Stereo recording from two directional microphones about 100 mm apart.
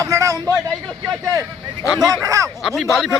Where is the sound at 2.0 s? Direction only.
35° right (ahead or behind).